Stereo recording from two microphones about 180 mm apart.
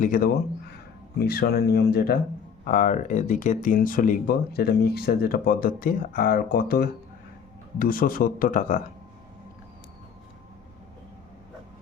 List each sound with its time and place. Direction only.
0.0 s speech: 50° left (ahead or behind)
2.6 s speech: 45° left (ahead or behind)